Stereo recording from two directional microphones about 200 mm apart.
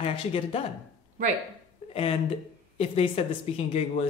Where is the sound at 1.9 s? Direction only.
30° left (ahead or behind).